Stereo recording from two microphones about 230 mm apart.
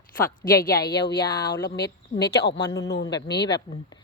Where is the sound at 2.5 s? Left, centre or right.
Centre.